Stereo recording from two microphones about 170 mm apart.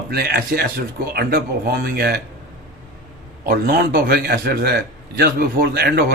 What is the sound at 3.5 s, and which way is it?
A man's voice, 60° right (ahead or behind).